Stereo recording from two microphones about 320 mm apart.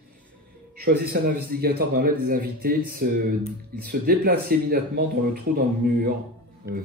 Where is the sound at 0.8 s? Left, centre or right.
Right.